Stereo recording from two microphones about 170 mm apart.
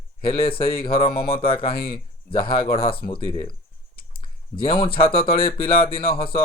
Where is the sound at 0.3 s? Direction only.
60° left (ahead or behind).